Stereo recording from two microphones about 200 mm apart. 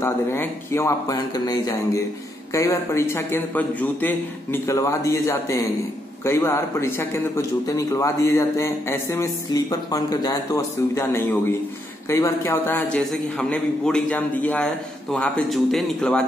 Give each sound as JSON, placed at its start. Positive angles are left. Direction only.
{"t": 0.0, "sound": "a man's voice", "side_deg": 10}